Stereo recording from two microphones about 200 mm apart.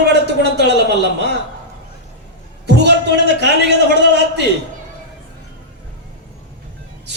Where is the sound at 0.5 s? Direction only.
60° right (ahead or behind).